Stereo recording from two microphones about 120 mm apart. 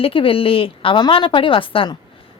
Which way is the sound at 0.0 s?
50° left (ahead or behind).